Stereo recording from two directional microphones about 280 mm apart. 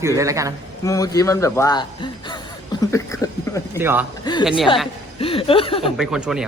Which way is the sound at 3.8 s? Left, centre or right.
Centre.